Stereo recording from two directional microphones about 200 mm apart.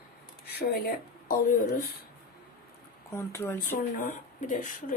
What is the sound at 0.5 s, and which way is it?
Speech, 50° left (ahead or behind).